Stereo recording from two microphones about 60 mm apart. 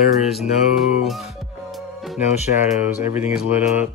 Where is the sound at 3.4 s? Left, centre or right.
Right.